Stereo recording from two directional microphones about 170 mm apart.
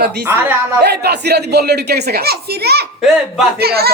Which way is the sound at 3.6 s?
65° right (ahead or behind).